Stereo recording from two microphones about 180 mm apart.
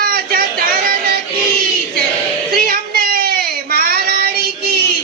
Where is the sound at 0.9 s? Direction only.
60° right (ahead or behind).